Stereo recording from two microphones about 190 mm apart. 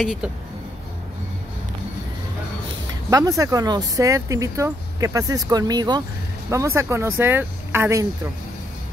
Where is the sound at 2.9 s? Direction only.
20° right (ahead or behind).